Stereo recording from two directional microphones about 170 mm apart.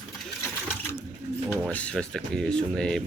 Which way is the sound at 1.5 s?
5° left (ahead or behind).